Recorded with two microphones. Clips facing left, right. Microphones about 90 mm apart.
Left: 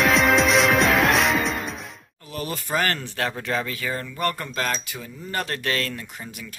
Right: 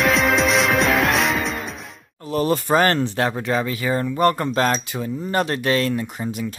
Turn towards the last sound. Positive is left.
turn(degrees=-20)  # may be behind; listen again after turning